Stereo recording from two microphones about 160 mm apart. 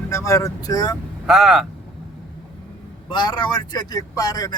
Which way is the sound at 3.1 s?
30° left (ahead or behind).